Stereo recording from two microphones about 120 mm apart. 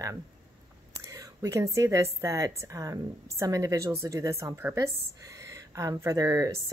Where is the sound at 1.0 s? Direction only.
30° right (ahead or behind).